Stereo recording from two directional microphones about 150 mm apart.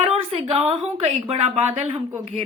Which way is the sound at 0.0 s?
40° right (ahead or behind).